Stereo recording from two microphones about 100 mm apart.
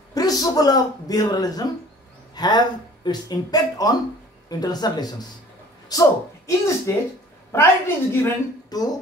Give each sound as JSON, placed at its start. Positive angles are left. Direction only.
{"t": 0.1, "sound": "a woman's voice", "side_deg": 40}
{"t": 8.6, "sound": "dishes", "side_deg": 40}